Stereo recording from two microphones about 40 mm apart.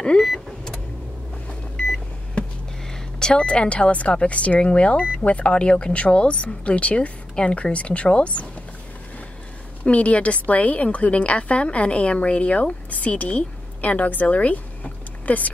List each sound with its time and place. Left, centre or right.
2.9 s a woman's voice: centre; by 8.5 s left
9.8 s a woman's voice: left